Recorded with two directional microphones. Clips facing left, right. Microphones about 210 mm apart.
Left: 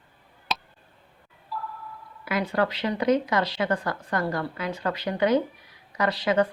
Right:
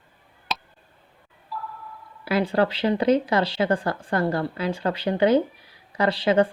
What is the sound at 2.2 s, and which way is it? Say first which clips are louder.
Speech: right 4 dB; 30° right (ahead or behind).